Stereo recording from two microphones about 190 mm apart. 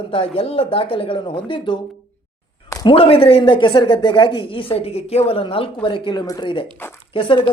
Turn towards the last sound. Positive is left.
turn(degrees=25)  # may be behind; listen again after turning